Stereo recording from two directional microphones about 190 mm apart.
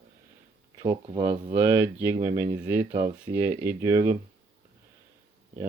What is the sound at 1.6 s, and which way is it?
Speech, 10° right (ahead or behind).